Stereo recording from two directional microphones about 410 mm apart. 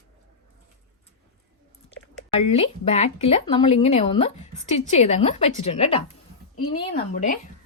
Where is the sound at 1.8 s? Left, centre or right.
Centre.